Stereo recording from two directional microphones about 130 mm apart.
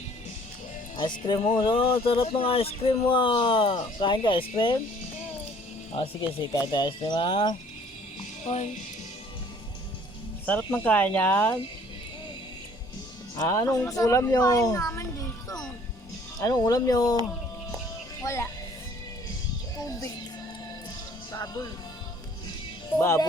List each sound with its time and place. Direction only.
0.9 s speech: 35° left (ahead or behind)
6.7 s speech: 35° left (ahead or behind)
8.4 s speech: 60° left (ahead or behind)
10.4 s speech: 15° left (ahead or behind)
13.3 s speech: 20° left (ahead or behind)
18.2 s speech: 25° left (ahead or behind)
21.3 s speech: 30° left (ahead or behind)
23.0 s speech: 20° left (ahead or behind)